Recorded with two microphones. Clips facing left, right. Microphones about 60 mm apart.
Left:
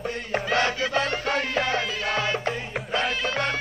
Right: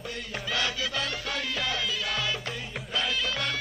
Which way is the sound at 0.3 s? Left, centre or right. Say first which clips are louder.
Left 8 dB; left.